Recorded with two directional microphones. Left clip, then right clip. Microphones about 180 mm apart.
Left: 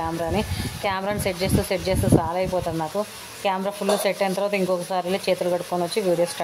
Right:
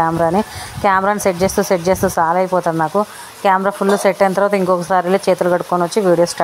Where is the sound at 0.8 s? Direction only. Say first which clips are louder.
Right 11 dB; 15° right (ahead or behind).